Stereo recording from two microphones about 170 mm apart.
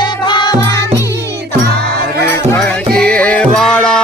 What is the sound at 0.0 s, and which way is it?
Music, 25° left (ahead or behind).